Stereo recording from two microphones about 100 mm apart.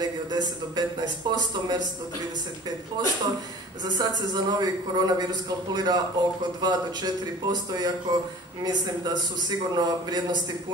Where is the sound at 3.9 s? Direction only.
40° right (ahead or behind).